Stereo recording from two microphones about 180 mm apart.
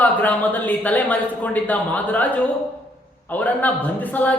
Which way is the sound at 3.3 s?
10° left (ahead or behind).